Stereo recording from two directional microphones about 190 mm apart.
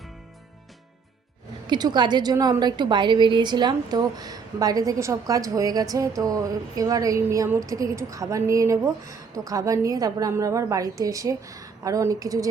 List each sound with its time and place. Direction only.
1.6 s a woman's voice: 25° right (ahead or behind)